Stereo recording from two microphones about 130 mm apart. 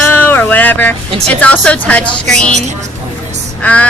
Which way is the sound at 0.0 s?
15° left (ahead or behind).